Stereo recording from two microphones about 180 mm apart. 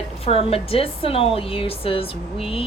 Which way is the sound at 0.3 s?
30° left (ahead or behind).